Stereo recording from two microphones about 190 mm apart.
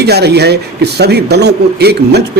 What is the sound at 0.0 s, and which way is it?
A man's voice, 60° right (ahead or behind).